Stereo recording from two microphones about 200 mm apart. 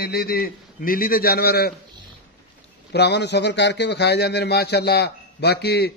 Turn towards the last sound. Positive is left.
turn(degrees=55)  # may be behind; listen again after turning